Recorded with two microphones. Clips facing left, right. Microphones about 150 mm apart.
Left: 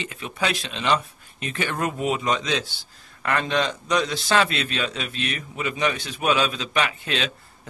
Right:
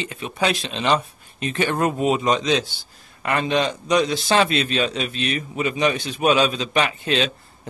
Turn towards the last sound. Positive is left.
turn(degrees=-25)  # may be behind; listen again after turning